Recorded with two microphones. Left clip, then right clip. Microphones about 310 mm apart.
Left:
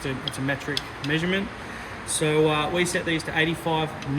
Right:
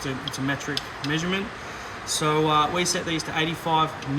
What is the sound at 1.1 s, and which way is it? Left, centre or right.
Speech, centre.